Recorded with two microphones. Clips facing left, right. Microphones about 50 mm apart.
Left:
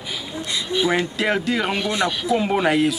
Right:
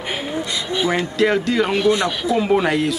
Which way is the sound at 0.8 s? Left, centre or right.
Centre.